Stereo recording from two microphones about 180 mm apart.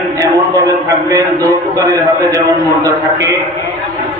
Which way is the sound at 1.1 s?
20° right (ahead or behind).